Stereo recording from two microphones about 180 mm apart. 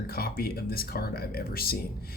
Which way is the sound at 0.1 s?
55° left (ahead or behind).